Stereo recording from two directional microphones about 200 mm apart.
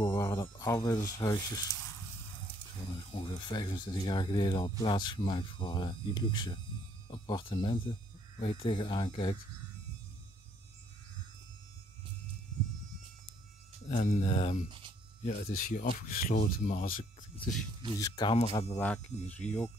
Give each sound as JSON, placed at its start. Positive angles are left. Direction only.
{"t": 0.0, "sound": "a sound", "side_deg": 20}
{"t": 1.0, "sound": "speech", "side_deg": 15}
{"t": 3.1, "sound": "speech", "side_deg": 25}
{"t": 13.8, "sound": "speech", "side_deg": 35}
{"t": 14.7, "sound": "speech", "side_deg": -25}
{"t": 15.4, "sound": "speech", "side_deg": 50}
{"t": 17.9, "sound": "speech", "side_deg": 20}
{"t": 18.8, "sound": "speech", "side_deg": 5}